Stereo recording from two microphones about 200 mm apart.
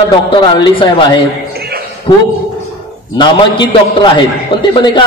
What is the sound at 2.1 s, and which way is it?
A man's voice, 25° left (ahead or behind).